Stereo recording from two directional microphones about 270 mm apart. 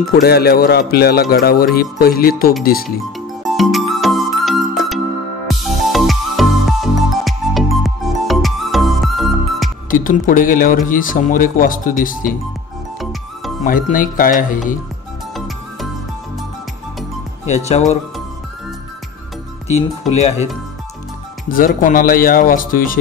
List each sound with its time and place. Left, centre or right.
0.1 s speech: left
3.4 s music: centre
9.8 s speech: left
13.7 s speech: left
15.3 s music: centre
17.5 s speech: left
20.1 s speech: left
21.5 s speech: left